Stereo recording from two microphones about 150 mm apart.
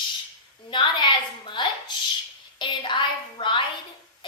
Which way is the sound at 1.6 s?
30° left (ahead or behind).